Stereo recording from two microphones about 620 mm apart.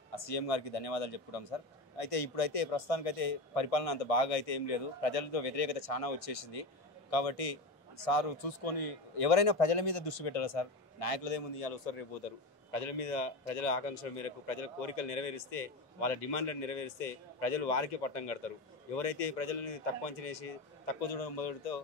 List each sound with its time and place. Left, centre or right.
0.1 s a man's voice: left
12.7 s a man's voice: left